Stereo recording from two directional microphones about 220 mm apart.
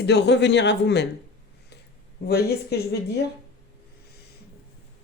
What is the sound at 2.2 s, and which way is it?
Speech, 45° left (ahead or behind).